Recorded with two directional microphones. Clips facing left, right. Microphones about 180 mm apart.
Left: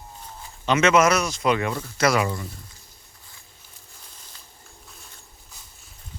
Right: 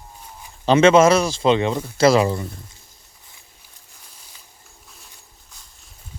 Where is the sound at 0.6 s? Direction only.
30° right (ahead or behind).